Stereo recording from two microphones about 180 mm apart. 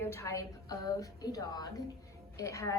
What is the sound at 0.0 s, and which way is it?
A woman's voice, 15° left (ahead or behind).